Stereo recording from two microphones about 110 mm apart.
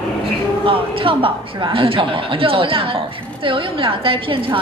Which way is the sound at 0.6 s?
50° right (ahead or behind).